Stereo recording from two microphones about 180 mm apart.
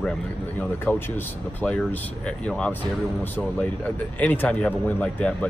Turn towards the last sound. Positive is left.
turn(degrees=10)  # may be behind; listen again after turning